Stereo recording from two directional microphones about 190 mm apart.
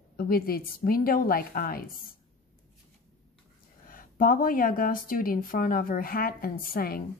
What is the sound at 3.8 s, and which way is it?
A woman's voice, 45° left (ahead or behind).